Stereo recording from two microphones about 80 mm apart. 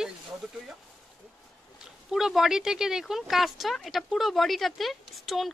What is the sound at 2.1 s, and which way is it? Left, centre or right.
Speech, centre.